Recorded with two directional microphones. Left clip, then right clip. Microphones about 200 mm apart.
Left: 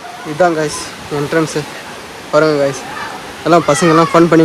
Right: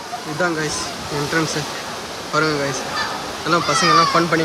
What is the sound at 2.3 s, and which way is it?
Speech, centre (ahead or behind).